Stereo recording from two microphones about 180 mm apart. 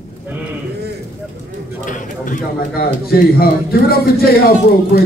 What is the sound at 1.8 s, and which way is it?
A man's voice, 45° left (ahead or behind).